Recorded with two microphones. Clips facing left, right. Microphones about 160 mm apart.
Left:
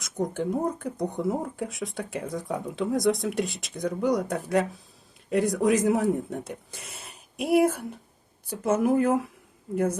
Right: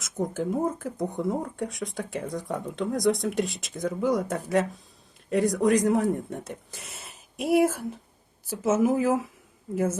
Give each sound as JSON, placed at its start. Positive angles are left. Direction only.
{"t": 0.0, "sound": "speech", "side_deg": 0}